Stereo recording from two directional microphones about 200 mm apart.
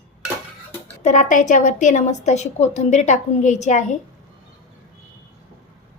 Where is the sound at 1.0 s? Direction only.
35° left (ahead or behind).